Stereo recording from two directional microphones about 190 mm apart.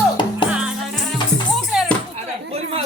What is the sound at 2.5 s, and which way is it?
Chatter, 35° right (ahead or behind).